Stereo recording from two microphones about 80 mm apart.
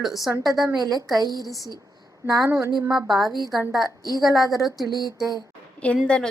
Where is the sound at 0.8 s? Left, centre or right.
Right.